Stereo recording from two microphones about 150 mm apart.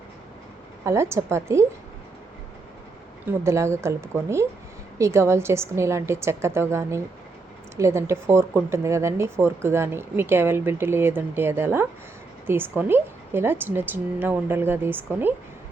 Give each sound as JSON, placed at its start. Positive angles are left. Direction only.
{"t": 0.9, "sound": "speech", "side_deg": -20}
{"t": 3.2, "sound": "speech", "side_deg": -20}